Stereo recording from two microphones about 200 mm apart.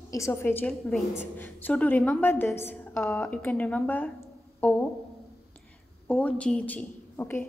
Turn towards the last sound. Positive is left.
turn(degrees=10)  # may be behind; listen again after turning